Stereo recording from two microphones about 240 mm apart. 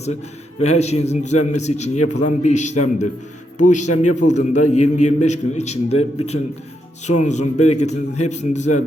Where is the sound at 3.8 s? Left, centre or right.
Left.